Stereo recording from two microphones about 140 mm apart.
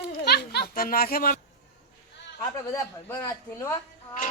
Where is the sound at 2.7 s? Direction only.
20° left (ahead or behind).